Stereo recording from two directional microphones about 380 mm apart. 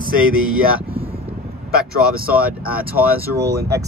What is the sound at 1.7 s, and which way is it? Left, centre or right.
Speech, right.